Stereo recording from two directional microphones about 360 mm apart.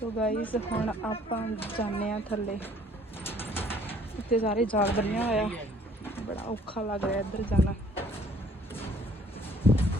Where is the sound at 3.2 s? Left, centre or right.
Centre.